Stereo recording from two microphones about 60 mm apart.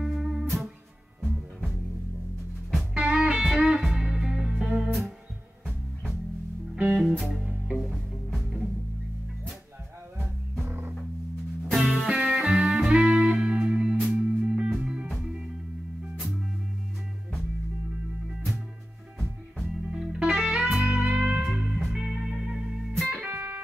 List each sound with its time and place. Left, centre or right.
0.0 s music: centre
2.9 s music: centre
6.8 s music: centre
7.2 s music: centre
10.7 s music: right
11.7 s music: centre
19.6 s music: centre
21.7 s music: centre
23.2 s music: right